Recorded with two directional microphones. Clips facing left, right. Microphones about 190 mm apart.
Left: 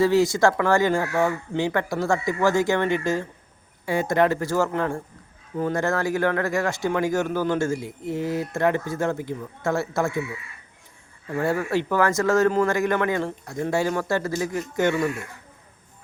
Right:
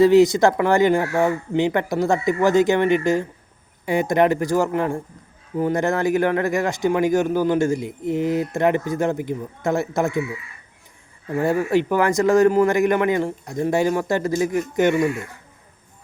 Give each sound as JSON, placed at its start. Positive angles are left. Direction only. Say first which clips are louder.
{"t": 0.0, "sound": "speech", "louder": "right 5 dB", "side_deg": -20}
{"t": 11.3, "sound": "speech", "louder": "right 4 dB", "side_deg": -15}